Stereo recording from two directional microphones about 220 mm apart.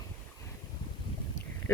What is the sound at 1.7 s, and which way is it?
Speech, 10° left (ahead or behind).